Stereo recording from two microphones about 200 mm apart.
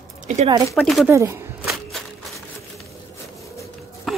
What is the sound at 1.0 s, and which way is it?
Speech, 15° right (ahead or behind).